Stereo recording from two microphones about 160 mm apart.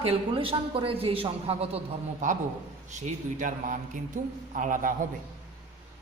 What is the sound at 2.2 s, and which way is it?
A woman's voice, 50° right (ahead or behind).